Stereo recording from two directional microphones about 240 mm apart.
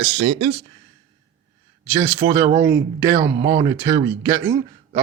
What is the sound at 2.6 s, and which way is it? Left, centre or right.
Speech, centre.